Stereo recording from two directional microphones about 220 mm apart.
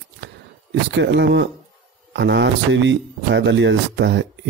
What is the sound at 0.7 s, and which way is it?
Speech, 55° right (ahead or behind).